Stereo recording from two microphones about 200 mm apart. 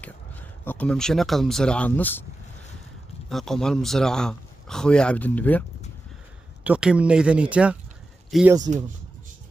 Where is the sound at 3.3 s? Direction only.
Centre (ahead or behind).